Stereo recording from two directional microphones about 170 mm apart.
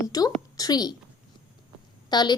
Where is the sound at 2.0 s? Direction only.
25° left (ahead or behind).